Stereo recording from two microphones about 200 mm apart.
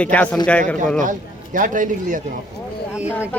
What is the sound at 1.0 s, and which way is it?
A man's voice, 40° right (ahead or behind).